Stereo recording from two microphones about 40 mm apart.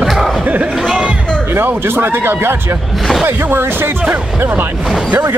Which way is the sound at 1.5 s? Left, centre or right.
Right.